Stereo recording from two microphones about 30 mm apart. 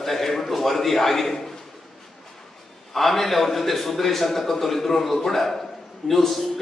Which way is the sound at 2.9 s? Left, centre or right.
Centre.